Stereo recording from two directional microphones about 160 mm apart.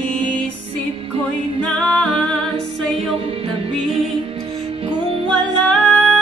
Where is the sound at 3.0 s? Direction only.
35° right (ahead or behind).